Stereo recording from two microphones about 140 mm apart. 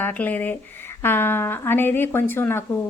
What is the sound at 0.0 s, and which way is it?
Speech, 10° left (ahead or behind).